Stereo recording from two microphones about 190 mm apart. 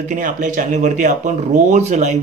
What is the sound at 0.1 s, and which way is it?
Speech, 40° right (ahead or behind).